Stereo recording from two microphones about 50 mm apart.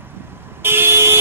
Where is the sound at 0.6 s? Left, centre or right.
Right.